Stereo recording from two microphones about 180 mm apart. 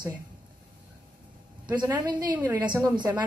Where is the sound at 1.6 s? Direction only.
25° right (ahead or behind).